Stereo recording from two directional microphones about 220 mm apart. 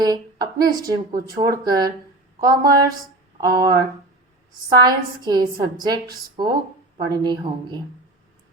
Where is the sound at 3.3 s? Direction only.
15° right (ahead or behind).